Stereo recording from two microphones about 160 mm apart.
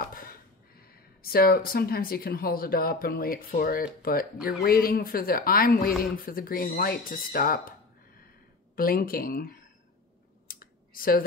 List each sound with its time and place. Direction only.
0.0 s a sound: 65° left (ahead or behind)
1.2 s a woman's voice: 70° left (ahead or behind)
8.7 s a woman's voice: 65° left (ahead or behind)
10.5 s clicking: 65° left (ahead or behind)